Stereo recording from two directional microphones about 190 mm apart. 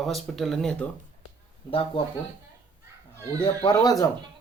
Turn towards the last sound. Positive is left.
turn(degrees=20)  # may be behind; listen again after turning